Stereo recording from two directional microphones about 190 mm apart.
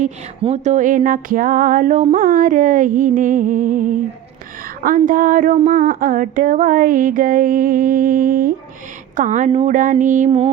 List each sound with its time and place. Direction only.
0.0 s music: 35° right (ahead or behind)
5.0 s music: 45° right (ahead or behind)
9.1 s speech: 40° right (ahead or behind)